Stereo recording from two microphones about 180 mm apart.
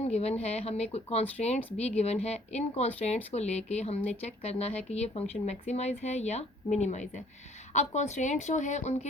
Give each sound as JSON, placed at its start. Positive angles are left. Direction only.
{"t": 0.0, "sound": "speech", "side_deg": 35}